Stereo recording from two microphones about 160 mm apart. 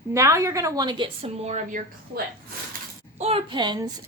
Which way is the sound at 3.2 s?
35° right (ahead or behind).